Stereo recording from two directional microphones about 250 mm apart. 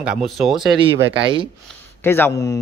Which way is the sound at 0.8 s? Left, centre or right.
Centre.